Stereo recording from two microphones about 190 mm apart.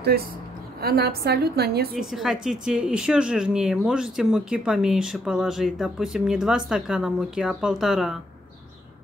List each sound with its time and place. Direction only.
0.7 s a woman's voice: 55° right (ahead or behind)
2.0 s speech: centre (ahead or behind)